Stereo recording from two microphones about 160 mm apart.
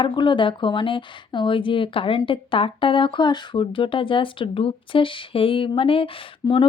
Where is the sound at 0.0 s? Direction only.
30° left (ahead or behind).